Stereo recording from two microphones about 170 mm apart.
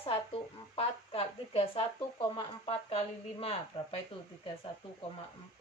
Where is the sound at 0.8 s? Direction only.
35° left (ahead or behind).